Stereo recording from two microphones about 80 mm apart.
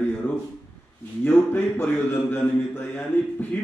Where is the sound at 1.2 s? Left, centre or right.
Left.